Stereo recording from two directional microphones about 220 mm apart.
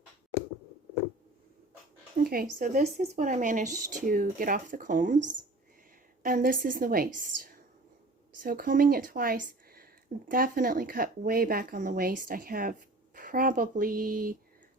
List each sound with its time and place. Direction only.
2.1 s speech: 40° right (ahead or behind)